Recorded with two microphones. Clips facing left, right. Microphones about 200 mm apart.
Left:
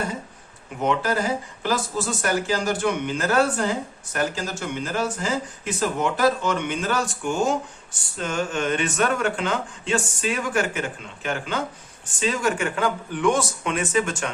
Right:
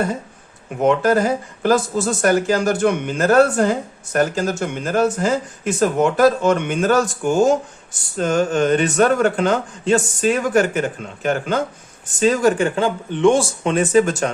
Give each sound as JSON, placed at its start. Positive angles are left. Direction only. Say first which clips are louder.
{"t": 0.9, "sound": "speech", "louder": "right 7 dB", "side_deg": -50}